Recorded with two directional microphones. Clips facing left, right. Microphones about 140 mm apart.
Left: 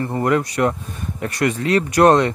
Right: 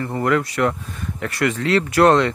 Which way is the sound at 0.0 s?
25° left (ahead or behind).